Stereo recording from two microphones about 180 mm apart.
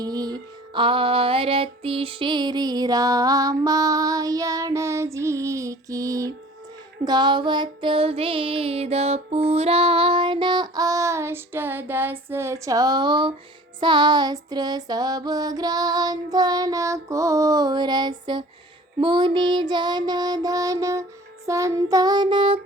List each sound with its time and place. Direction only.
0.0 s music: 20° right (ahead or behind)